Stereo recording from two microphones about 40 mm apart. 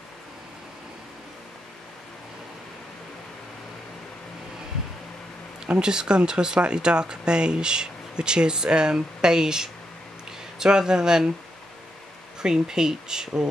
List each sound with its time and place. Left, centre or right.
5.8 s speech: right
12.4 s speech: centre